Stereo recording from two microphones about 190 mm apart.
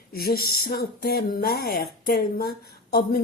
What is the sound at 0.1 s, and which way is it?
Speech, 50° left (ahead or behind).